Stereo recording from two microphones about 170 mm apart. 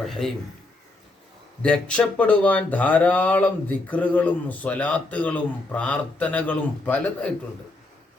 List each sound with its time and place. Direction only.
1.6 s speech: 5° left (ahead or behind)